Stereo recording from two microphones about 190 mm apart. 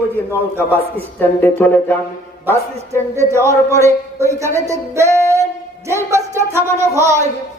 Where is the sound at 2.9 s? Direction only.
15° right (ahead or behind).